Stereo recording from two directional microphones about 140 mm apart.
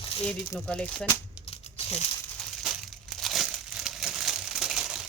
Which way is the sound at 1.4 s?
45° left (ahead or behind).